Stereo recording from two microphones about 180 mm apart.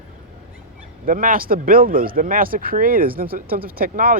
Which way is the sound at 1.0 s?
50° right (ahead or behind).